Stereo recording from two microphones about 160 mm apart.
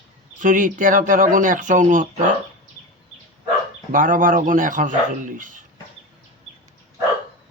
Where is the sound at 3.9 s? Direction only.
55° right (ahead or behind).